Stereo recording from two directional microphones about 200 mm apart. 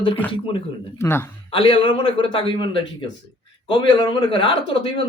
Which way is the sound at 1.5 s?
25° left (ahead or behind).